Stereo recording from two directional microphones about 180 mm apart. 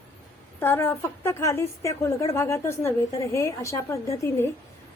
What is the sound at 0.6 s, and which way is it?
A woman's voice, 10° left (ahead or behind).